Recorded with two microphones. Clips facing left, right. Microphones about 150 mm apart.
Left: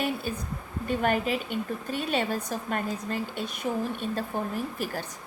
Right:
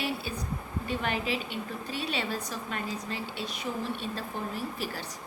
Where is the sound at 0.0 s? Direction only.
45° left (ahead or behind).